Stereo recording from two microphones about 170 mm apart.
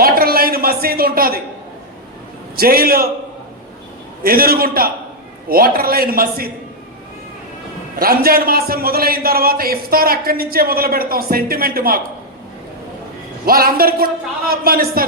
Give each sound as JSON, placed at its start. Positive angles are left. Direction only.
{"t": 0.0, "sound": "a sound", "side_deg": -60}
{"t": 2.6, "sound": "a man's voice", "side_deg": -60}
{"t": 4.2, "sound": "a man's voice", "side_deg": -60}
{"t": 7.9, "sound": "a man's voice", "side_deg": -60}
{"t": 13.4, "sound": "a man's voice", "side_deg": -60}